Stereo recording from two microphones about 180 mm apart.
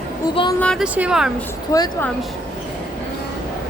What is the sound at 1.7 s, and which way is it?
Speech, 20° left (ahead or behind).